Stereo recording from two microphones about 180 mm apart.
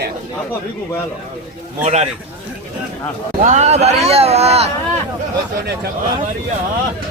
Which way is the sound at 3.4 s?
40° right (ahead or behind).